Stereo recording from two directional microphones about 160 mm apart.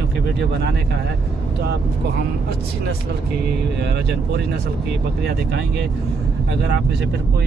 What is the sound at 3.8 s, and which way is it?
Speech, 90° right.